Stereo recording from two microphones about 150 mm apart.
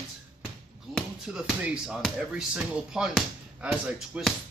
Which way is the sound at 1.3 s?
5° right (ahead or behind).